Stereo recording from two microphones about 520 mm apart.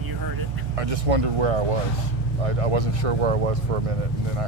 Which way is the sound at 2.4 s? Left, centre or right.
Right.